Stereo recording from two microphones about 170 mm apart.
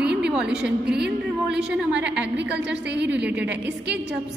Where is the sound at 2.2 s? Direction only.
90° right.